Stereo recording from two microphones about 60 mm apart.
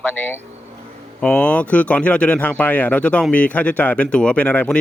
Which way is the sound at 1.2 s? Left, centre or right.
Centre.